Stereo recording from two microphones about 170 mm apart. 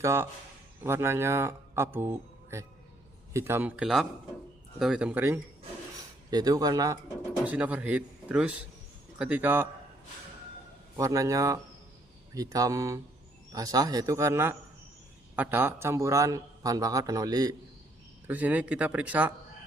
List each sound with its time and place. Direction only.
0.0 s speech: 15° right (ahead or behind)
6.3 s a man's voice: 20° right (ahead or behind)
7.4 s speech: 10° right (ahead or behind)
10.9 s a man's voice: 20° right (ahead or behind)
18.3 s speech: 10° right (ahead or behind)